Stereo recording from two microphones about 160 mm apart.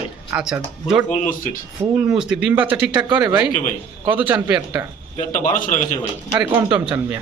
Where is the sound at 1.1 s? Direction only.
55° left (ahead or behind).